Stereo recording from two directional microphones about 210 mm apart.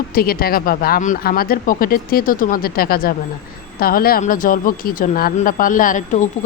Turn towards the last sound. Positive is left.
turn(degrees=35)  # may be behind; listen again after turning